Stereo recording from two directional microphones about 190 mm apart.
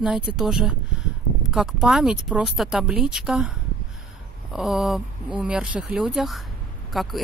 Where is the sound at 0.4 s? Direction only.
5° right (ahead or behind).